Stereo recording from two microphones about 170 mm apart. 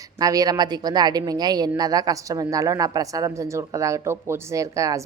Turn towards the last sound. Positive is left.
turn(degrees=-20)  # may be behind; listen again after turning